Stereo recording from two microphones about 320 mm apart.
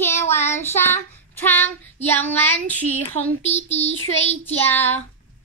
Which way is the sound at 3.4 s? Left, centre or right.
Left.